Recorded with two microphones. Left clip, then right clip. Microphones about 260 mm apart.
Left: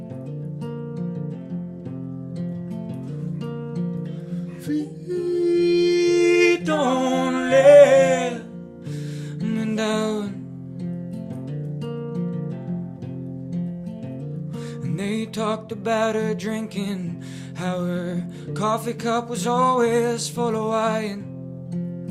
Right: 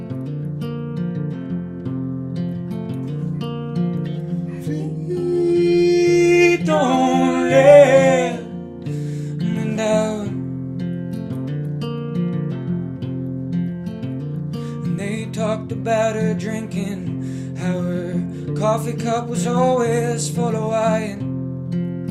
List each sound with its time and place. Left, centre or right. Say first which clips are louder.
4.7 s music: left 1 dB; left
9.5 s music: right 5 dB; left
14.9 s music: left 1 dB; left